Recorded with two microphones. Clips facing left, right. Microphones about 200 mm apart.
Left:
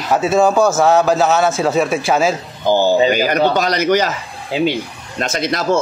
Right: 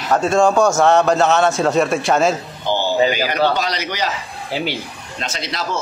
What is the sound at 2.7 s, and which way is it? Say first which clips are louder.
A man's voice: left 4 dB; 45° left (ahead or behind).